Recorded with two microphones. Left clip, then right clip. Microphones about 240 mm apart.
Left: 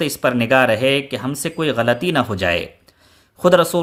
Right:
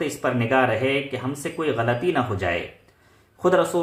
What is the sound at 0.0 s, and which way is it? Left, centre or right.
Speech, left.